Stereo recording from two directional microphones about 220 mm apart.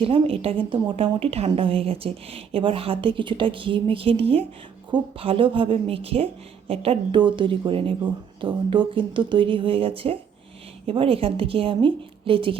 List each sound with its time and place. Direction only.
0.0 s a woman's voice: 25° right (ahead or behind)